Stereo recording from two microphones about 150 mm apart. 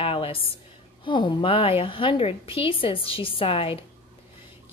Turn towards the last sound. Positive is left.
turn(degrees=40)  # may be behind; listen again after turning